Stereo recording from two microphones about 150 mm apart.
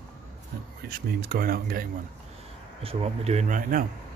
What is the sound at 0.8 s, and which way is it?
Speech, 90° right.